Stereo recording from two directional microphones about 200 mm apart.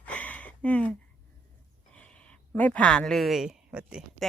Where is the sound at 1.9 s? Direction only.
5° left (ahead or behind).